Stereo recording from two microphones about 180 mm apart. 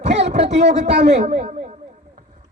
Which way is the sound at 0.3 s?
70° right (ahead or behind).